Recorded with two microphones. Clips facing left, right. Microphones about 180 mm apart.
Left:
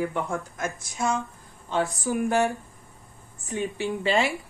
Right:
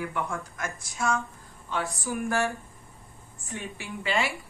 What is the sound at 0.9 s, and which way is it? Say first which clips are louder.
A woman's voice: even; 20° left (ahead or behind).